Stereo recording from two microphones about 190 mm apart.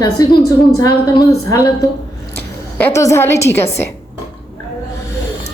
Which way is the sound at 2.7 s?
15° left (ahead or behind).